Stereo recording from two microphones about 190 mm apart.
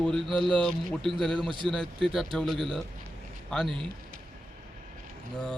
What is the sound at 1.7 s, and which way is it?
Speech, 5° left (ahead or behind).